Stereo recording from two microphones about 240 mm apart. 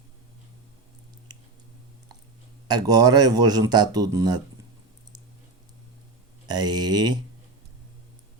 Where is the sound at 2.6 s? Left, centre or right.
Centre.